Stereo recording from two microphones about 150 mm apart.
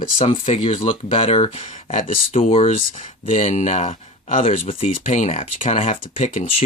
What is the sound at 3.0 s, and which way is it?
Speech, 55° left (ahead or behind).